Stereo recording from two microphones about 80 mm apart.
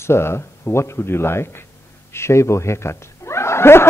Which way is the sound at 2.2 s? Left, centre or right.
Left.